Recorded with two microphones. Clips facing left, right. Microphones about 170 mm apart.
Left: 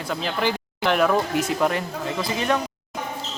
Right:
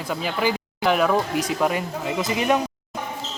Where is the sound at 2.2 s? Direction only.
15° right (ahead or behind).